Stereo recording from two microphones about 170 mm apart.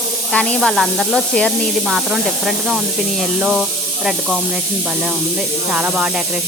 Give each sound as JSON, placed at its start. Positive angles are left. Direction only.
{"t": 0.3, "sound": "speech", "side_deg": 0}
{"t": 5.7, "sound": "speech", "side_deg": -10}